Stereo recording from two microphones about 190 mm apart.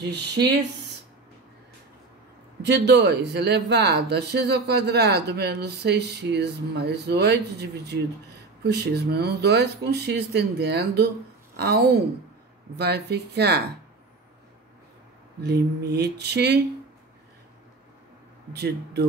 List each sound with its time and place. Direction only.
0.0 s speech: 60° right (ahead or behind)
2.6 s speech: 60° right (ahead or behind)
15.4 s speech: 60° right (ahead or behind)
18.5 s speech: 60° right (ahead or behind)